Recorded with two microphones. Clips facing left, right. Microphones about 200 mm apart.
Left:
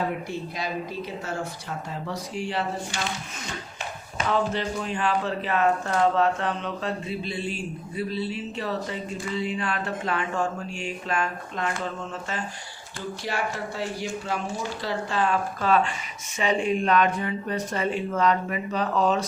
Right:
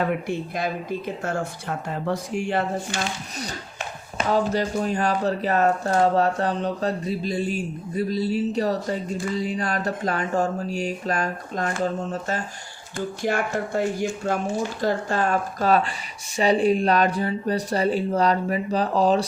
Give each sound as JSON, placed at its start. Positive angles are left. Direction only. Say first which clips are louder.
{"t": 0.3, "sound": "speech", "louder": "right 5 dB", "side_deg": -55}
{"t": 4.3, "sound": "speech", "louder": "right 3 dB", "side_deg": -40}
{"t": 13.2, "sound": "speech", "louder": "right 5 dB", "side_deg": -50}